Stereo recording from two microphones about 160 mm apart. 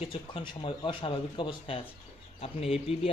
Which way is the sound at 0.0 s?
35° left (ahead or behind).